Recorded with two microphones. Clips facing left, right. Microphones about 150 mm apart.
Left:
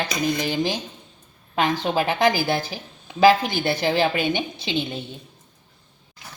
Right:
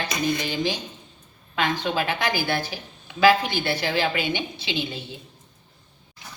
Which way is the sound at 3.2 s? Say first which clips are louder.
Left 2 dB; 40° left (ahead or behind).